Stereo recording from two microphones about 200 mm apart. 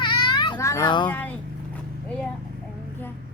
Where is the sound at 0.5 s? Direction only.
15° left (ahead or behind).